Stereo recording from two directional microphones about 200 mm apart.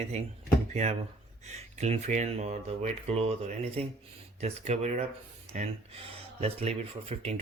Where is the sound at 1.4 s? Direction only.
35° right (ahead or behind).